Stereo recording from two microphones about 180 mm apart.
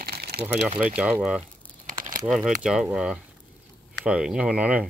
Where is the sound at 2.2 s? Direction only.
5° right (ahead or behind).